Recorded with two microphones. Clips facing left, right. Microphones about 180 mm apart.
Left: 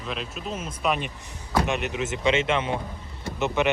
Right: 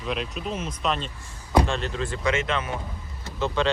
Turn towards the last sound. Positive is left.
turn(degrees=20)  # may be behind; listen again after turning